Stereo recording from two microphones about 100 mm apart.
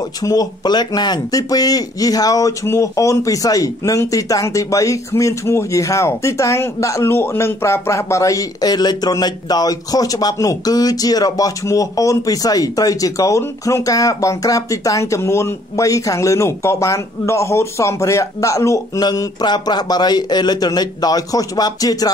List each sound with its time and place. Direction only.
0.2 s speech: 40° left (ahead or behind)
18.9 s a man's voice: 40° left (ahead or behind)